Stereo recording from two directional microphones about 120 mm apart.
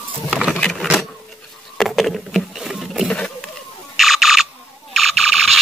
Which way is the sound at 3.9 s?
Centre (ahead or behind).